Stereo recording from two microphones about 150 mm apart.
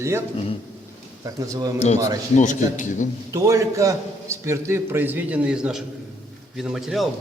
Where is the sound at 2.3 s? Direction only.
55° left (ahead or behind).